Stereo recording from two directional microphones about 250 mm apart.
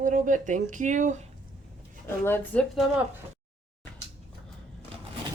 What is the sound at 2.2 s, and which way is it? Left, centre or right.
Speech, centre.